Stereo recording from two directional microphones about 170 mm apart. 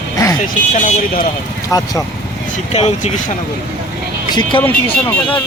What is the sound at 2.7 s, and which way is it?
Speech, 40° left (ahead or behind).